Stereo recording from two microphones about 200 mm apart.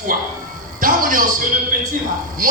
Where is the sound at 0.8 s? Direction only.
45° right (ahead or behind).